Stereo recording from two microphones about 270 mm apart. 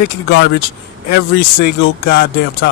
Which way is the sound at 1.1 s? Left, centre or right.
Left.